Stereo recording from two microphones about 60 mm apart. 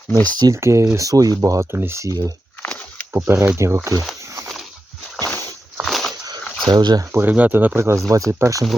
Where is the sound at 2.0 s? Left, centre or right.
Right.